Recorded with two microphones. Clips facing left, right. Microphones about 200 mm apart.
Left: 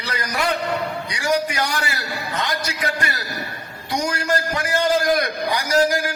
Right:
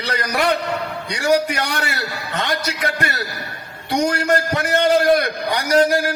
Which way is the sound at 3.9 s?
30° right (ahead or behind).